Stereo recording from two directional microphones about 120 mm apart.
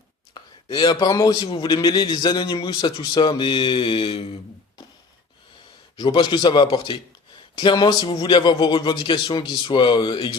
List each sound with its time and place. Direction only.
0.3 s a sound: 40° left (ahead or behind)
1.1 s a man's voice: 30° left (ahead or behind)
1.5 s speech: 40° left (ahead or behind)
6.0 s speech: 40° left (ahead or behind)